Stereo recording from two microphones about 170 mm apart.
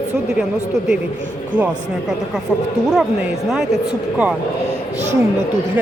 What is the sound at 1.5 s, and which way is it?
Speech, 50° right (ahead or behind).